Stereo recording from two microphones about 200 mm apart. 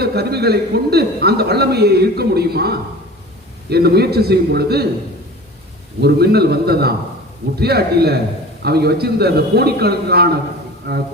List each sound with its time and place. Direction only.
0.0 s a man's voice: 55° right (ahead or behind)
6.0 s a man's voice: 55° right (ahead or behind)